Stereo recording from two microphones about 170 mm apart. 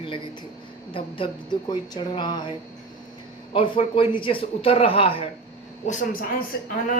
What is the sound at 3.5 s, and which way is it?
Speech, 30° left (ahead or behind).